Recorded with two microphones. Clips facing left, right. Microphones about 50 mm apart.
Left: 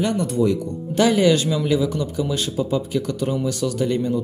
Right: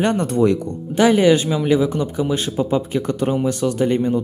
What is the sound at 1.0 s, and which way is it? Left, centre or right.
Speech, right.